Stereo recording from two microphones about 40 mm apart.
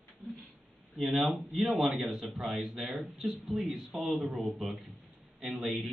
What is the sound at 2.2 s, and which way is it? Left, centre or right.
Speech, centre.